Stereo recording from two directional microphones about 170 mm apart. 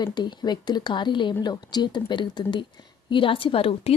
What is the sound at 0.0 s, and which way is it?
A woman's voice, 25° left (ahead or behind).